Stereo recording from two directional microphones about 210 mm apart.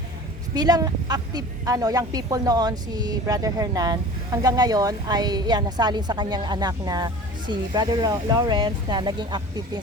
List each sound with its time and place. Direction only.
0.5 s a woman's voice: 20° right (ahead or behind)